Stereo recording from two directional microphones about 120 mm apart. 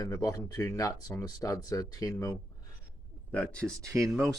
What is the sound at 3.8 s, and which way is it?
Speech, 25° right (ahead or behind).